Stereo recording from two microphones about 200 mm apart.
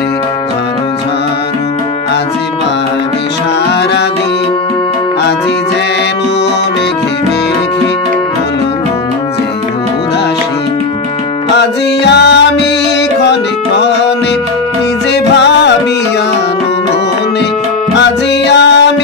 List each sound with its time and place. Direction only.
11.5 s music: 60° left (ahead or behind)
15.3 s music: 60° left (ahead or behind)
17.9 s music: 60° left (ahead or behind)